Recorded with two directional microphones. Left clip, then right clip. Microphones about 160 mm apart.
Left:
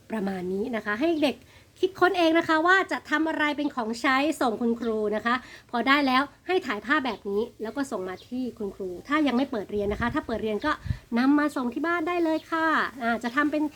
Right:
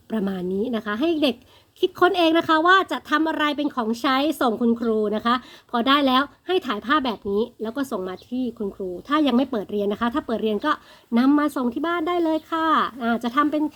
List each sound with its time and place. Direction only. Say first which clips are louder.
0.1 s a woman's voice: right 4 dB; 30° right (ahead or behind)